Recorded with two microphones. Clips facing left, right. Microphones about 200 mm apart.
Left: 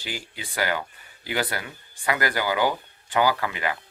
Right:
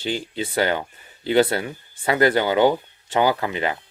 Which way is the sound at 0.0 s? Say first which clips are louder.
Right 10 dB; 25° right (ahead or behind).